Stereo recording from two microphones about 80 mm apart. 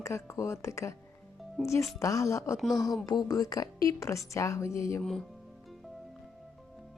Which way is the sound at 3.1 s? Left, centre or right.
Left.